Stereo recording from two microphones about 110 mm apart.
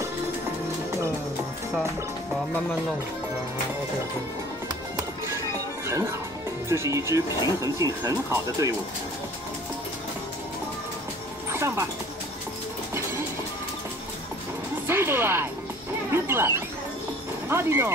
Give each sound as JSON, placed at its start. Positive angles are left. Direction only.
{"t": 5.9, "sound": "speech", "side_deg": -25}
{"t": 11.5, "sound": "dog", "side_deg": -25}
{"t": 14.9, "sound": "speech", "side_deg": -20}
{"t": 16.1, "sound": "a sound", "side_deg": -20}
{"t": 17.5, "sound": "speech", "side_deg": -20}